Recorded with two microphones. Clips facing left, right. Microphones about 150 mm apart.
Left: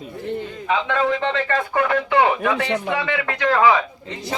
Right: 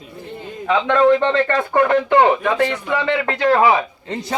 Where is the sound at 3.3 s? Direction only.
25° right (ahead or behind).